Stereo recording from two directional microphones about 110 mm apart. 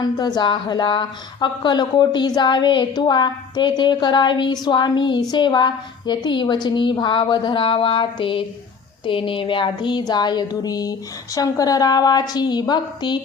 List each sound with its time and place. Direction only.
0.0 s a woman's voice: 40° left (ahead or behind)